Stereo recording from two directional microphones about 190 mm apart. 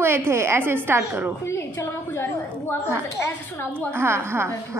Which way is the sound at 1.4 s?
15° left (ahead or behind).